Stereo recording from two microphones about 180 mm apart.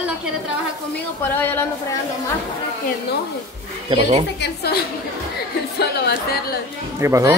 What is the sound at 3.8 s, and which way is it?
Speech, 30° right (ahead or behind).